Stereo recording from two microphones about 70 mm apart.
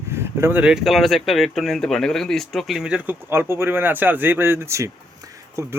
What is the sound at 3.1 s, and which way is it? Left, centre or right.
Speech, right.